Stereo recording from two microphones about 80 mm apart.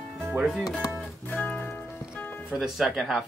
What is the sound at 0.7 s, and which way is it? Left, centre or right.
Music, centre.